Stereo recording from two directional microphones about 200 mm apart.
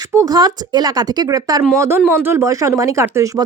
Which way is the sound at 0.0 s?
15° right (ahead or behind).